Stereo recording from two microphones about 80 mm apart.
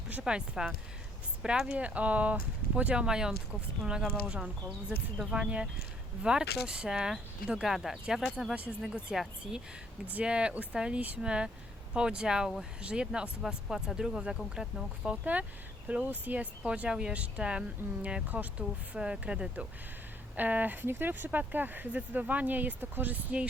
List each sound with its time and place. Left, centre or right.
0.1 s speech: centre